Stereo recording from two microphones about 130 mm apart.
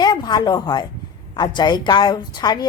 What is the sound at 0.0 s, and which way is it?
A woman's voice, 35° left (ahead or behind).